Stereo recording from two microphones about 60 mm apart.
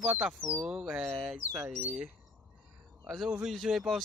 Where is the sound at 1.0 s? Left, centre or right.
Centre.